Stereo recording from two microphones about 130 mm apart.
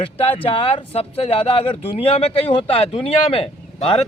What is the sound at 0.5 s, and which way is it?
Speech, 45° left (ahead or behind).